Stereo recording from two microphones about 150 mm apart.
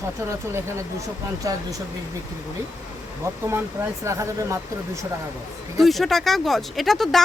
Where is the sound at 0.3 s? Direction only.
20° right (ahead or behind).